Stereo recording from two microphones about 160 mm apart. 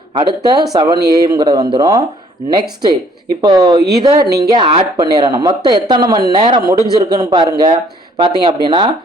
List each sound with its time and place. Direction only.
0.2 s speech: 30° right (ahead or behind)